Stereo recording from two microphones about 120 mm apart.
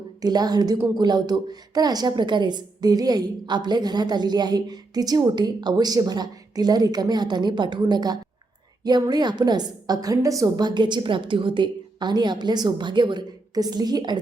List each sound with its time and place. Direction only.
0.2 s a woman's voice: 35° right (ahead or behind)